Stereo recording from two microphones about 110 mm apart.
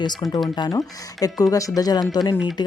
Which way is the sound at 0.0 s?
40° left (ahead or behind).